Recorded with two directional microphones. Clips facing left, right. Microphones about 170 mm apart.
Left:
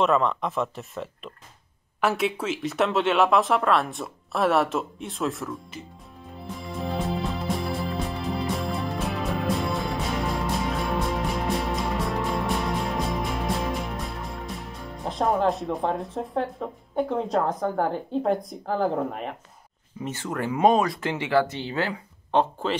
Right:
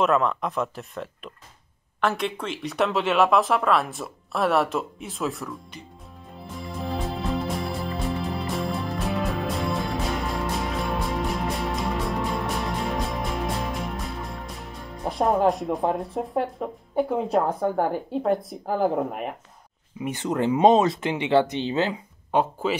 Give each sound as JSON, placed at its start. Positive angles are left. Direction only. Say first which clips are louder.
{"t": 0.0, "sound": "speech", "louder": "even", "side_deg": 0}
{"t": 6.3, "sound": "music", "louder": "left 1 dB", "side_deg": 0}
{"t": 15.0, "sound": "speech", "louder": "right 2 dB", "side_deg": -10}
{"t": 22.3, "sound": "speech", "louder": "even", "side_deg": -5}